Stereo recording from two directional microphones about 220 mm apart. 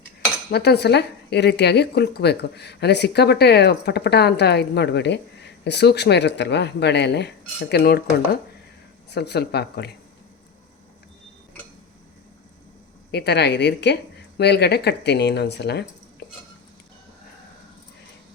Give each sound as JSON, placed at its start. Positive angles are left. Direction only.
{"t": 0.5, "sound": "speech", "side_deg": 45}
{"t": 13.1, "sound": "speech", "side_deg": 50}